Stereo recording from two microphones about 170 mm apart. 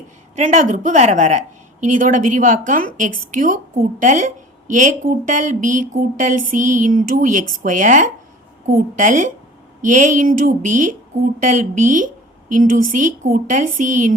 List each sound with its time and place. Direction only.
0.3 s speech: 45° right (ahead or behind)